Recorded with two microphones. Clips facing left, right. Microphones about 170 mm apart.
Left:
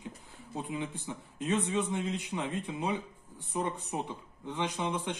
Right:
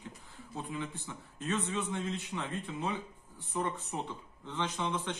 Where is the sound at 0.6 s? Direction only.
15° left (ahead or behind).